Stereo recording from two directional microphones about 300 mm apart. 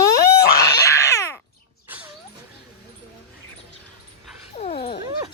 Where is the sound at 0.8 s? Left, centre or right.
Centre.